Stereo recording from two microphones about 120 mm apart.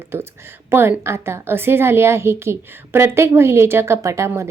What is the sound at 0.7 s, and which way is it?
A woman's voice, 20° right (ahead or behind).